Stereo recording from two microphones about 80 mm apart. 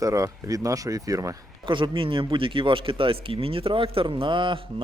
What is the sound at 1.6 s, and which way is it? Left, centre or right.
Speech, right.